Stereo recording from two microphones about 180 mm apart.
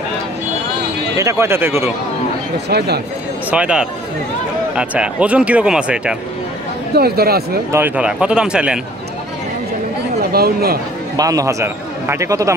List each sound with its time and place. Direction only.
1.1 s speech: 15° right (ahead or behind)
2.7 s speech: 65° right (ahead or behind)
3.4 s speech: 5° right (ahead or behind)
7.0 s speech: 60° right (ahead or behind)
7.7 s speech: 10° right (ahead or behind)
10.3 s speech: 60° right (ahead or behind)
11.1 s speech: 20° right (ahead or behind)